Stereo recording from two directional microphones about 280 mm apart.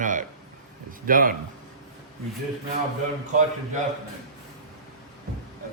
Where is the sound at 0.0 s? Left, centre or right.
Right.